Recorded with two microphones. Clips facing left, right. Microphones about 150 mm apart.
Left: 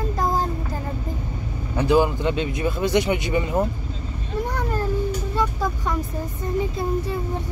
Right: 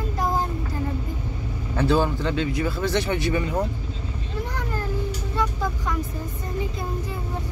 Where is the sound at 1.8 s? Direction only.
15° left (ahead or behind).